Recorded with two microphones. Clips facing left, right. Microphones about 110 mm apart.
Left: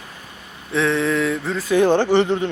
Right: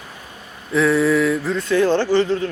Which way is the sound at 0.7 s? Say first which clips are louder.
Right 3 dB; 5° right (ahead or behind).